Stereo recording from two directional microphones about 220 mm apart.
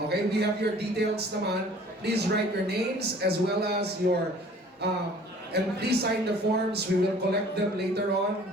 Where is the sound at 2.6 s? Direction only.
50° right (ahead or behind).